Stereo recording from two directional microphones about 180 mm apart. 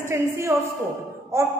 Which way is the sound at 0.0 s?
15° right (ahead or behind).